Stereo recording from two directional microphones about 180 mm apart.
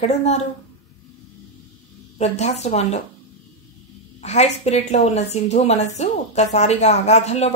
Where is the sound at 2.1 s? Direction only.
35° left (ahead or behind).